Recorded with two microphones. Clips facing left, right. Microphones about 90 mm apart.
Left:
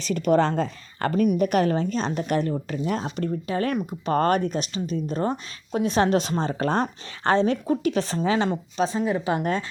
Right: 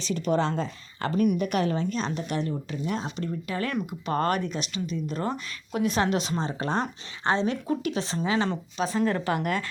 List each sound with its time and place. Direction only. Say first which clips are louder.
0.0 s a woman's voice: left 5 dB; 50° left (ahead or behind)
9.0 s speech: left 1 dB; 10° left (ahead or behind)
9.3 s speech: left 3 dB; 25° left (ahead or behind)